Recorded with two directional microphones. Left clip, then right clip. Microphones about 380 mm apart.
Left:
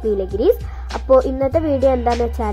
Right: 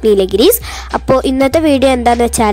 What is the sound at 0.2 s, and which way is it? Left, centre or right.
A woman's voice, right.